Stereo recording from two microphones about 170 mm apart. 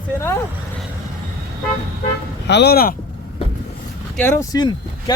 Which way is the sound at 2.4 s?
85° left.